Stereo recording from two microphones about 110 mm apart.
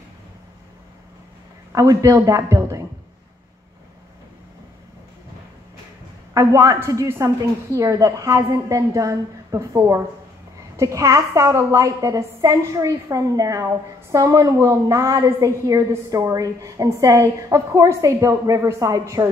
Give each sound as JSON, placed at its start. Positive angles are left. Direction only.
{"t": 1.7, "sound": "a woman's voice", "side_deg": -30}
{"t": 6.3, "sound": "a woman's voice", "side_deg": -30}